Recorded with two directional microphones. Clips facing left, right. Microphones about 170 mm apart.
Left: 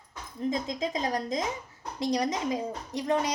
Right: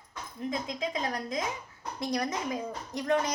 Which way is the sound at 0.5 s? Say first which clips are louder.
Left 1 dB; 40° left (ahead or behind).